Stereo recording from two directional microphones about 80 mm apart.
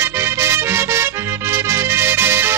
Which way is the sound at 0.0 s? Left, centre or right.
Right.